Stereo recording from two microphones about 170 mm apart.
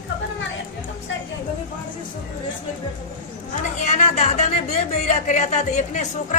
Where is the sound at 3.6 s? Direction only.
40° left (ahead or behind).